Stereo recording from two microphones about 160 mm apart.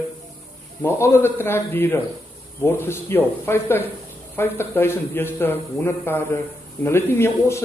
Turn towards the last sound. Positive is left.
turn(degrees=15)  # may be behind; listen again after turning